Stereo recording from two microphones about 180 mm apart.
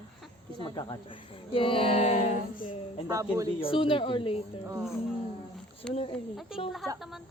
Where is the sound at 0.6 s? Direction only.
25° left (ahead or behind); by 2.6 s 40° left (ahead or behind).